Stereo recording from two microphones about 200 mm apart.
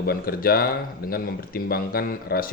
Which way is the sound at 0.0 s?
50° left (ahead or behind).